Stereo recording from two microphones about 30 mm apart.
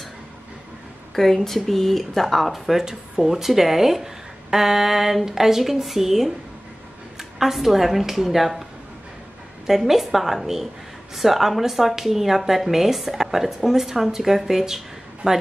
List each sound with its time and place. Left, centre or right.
1.1 s speech: centre
9.7 s speech: centre
15.2 s speech: right